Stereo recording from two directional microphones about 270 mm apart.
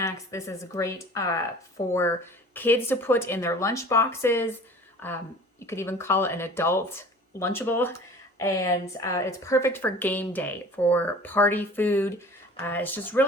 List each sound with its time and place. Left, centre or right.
0.0 s speech: centre